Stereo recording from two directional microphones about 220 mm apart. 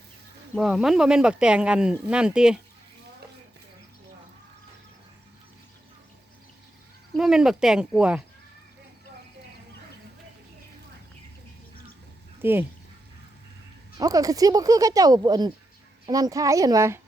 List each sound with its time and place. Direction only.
0.5 s speech: centre (ahead or behind)
7.2 s speech: centre (ahead or behind)
12.4 s speech: 10° right (ahead or behind)
14.0 s speech: 15° right (ahead or behind)